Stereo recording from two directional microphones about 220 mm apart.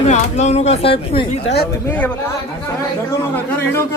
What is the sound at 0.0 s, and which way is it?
Speech, 30° left (ahead or behind).